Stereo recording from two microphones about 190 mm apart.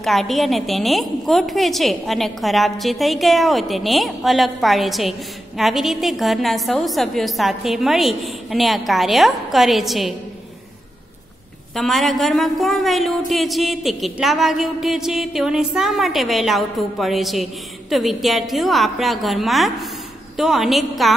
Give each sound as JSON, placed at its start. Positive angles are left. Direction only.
{"t": 0.0, "sound": "a woman's voice", "side_deg": 0}
{"t": 11.7, "sound": "a woman's voice", "side_deg": 0}